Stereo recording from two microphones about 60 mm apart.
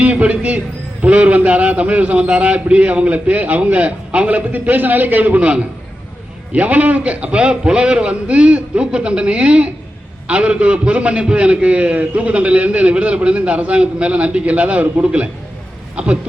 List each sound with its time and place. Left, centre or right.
0.0 s a man's voice: right